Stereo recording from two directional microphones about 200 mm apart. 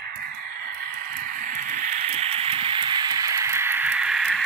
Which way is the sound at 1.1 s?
40° right (ahead or behind).